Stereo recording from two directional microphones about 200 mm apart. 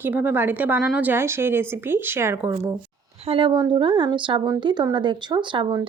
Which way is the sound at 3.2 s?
25° right (ahead or behind).